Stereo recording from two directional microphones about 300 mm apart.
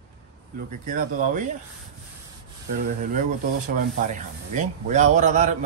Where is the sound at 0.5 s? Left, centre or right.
Right.